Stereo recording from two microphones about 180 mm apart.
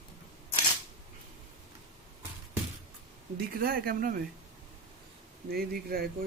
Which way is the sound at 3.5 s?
55° right (ahead or behind).